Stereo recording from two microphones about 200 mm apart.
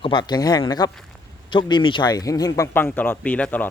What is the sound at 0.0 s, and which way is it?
Speech, 25° left (ahead or behind).